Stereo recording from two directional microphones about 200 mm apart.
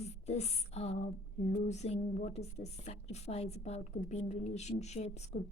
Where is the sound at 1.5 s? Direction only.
35° left (ahead or behind).